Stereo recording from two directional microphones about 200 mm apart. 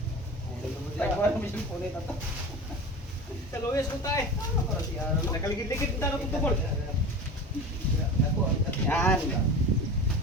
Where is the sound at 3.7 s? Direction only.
15° left (ahead or behind).